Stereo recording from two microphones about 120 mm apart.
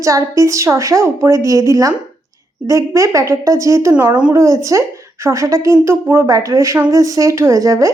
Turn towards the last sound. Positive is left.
turn(degrees=-25)  # may be behind; listen again after turning